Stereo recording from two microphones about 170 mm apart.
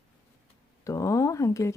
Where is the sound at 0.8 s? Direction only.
20° left (ahead or behind).